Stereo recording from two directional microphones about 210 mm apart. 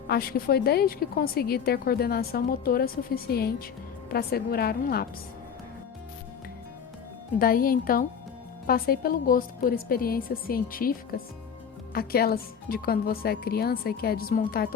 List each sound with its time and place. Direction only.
0.1 s a woman's voice: 45° left (ahead or behind)
7.3 s a woman's voice: 45° left (ahead or behind)